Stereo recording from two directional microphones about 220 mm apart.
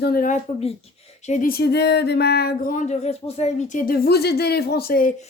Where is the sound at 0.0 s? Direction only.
40° left (ahead or behind).